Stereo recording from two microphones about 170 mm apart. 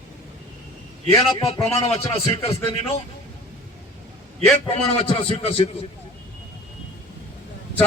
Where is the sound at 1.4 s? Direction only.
35° left (ahead or behind).